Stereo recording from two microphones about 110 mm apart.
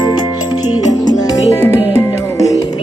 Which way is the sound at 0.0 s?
40° left (ahead or behind).